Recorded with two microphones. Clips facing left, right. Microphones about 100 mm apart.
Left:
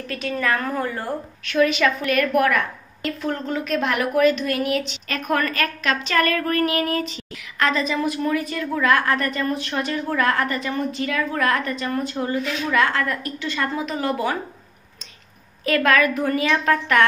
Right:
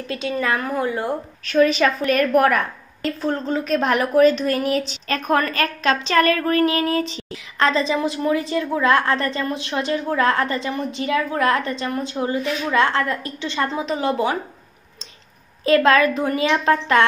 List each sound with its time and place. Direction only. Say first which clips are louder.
0.1 s a woman's voice: right 1 dB; 25° right (ahead or behind)
1.4 s a woman's voice: right 2 dB; 35° right (ahead or behind)
15.6 s a woman's voice: right 3 dB; 25° right (ahead or behind)